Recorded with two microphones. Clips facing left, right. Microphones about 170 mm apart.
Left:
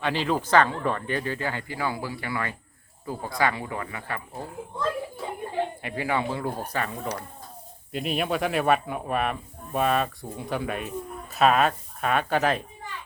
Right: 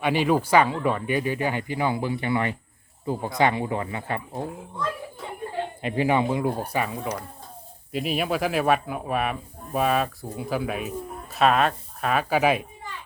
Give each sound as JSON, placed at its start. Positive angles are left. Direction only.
{"t": 0.0, "sound": "speech", "side_deg": -15}
{"t": 5.8, "sound": "speech", "side_deg": -20}